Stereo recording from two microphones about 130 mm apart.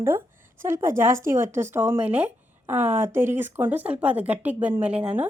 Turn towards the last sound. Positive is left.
turn(degrees=-10)  # may be behind; listen again after turning